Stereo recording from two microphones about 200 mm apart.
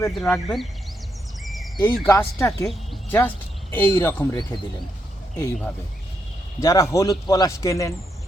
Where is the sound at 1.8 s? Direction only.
10° left (ahead or behind).